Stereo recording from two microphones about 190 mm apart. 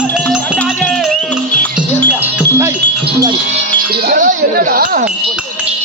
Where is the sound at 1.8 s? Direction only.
10° right (ahead or behind).